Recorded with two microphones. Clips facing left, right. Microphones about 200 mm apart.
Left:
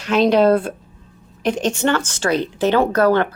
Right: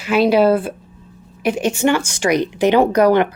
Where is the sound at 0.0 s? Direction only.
5° right (ahead or behind).